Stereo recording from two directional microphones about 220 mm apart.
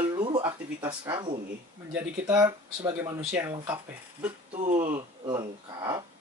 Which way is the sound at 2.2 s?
15° right (ahead or behind).